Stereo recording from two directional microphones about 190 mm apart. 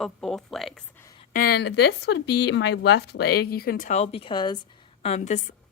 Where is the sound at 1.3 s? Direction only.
55° left (ahead or behind); by 4.6 s 25° left (ahead or behind).